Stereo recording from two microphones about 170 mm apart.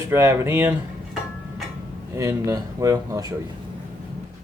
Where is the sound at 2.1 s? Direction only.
20° right (ahead or behind).